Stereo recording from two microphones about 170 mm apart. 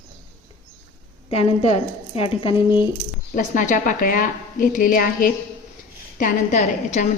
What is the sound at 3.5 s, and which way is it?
A woman's voice, 50° left (ahead or behind).